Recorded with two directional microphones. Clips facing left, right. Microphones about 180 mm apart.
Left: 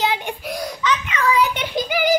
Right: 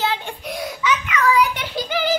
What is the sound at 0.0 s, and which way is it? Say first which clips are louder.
Child singing: left 2 dB; 15° left (ahead or behind).